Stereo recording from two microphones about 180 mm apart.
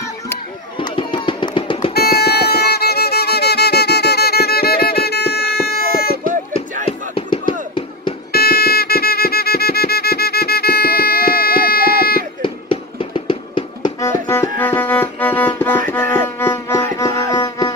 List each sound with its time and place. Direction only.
0.7 s music: 30° left (ahead or behind)
2.0 s violin: 60° left (ahead or behind)
6.9 s music: 30° left (ahead or behind)
8.3 s music: 60° left (ahead or behind)
12.4 s music: 30° left (ahead or behind)
14.0 s music: 15° left (ahead or behind)